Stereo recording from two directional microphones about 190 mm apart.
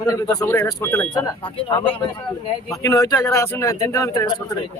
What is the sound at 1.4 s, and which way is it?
Speech, 30° left (ahead or behind).